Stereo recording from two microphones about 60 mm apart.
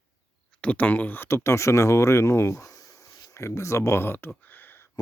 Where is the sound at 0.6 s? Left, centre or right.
Left.